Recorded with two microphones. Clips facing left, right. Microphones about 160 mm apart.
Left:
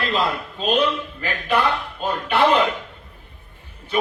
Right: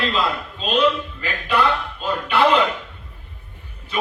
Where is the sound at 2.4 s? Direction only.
30° left (ahead or behind).